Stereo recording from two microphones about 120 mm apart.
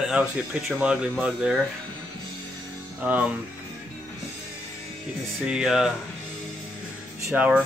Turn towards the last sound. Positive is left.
turn(degrees=-10)  # may be behind; listen again after turning